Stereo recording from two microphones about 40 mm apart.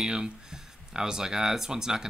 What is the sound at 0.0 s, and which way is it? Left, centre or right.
Cattle, centre.